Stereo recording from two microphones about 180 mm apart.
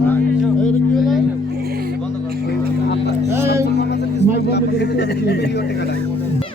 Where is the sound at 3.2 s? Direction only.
15° right (ahead or behind).